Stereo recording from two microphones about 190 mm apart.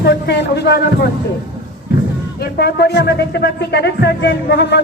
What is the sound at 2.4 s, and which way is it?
Speech, 55° left (ahead or behind).